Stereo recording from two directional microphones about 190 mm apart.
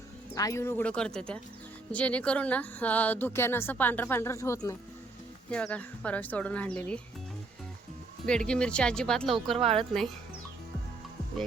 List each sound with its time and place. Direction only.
0.3 s speech: 15° left (ahead or behind)
8.3 s speech: 5° left (ahead or behind)
9.6 s speech: 30° right (ahead or behind)